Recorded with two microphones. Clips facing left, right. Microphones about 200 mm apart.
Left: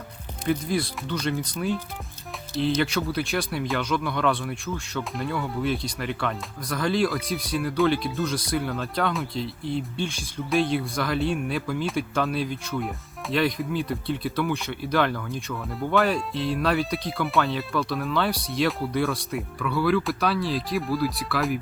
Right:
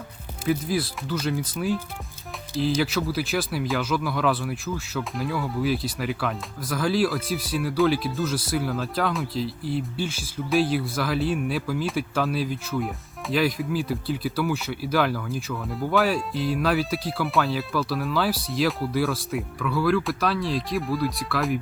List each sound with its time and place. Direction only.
0.4 s speech: 5° right (ahead or behind)